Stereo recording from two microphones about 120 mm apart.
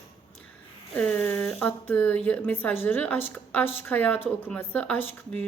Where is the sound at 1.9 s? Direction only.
15° left (ahead or behind).